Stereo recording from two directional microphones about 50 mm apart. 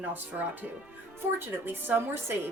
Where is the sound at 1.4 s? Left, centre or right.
Right.